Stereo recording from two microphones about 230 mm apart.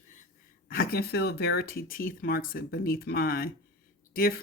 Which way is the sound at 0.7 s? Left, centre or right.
Left.